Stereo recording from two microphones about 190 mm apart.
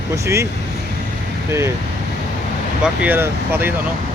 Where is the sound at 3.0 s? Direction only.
10° right (ahead or behind).